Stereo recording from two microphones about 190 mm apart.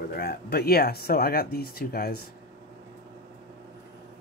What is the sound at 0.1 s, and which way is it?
Speech, 55° left (ahead or behind).